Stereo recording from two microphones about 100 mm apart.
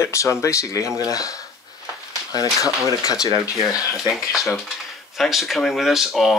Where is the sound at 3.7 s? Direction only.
35° left (ahead or behind).